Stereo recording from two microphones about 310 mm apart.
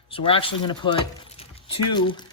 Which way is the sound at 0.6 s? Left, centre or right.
Centre.